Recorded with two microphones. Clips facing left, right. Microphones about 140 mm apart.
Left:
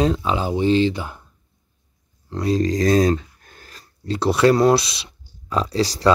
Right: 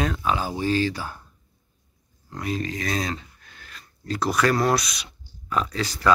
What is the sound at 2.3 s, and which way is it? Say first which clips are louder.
Speech: left 9 dB; 30° left (ahead or behind).